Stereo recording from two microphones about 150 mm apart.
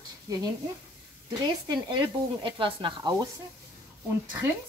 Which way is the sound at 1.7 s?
30° right (ahead or behind).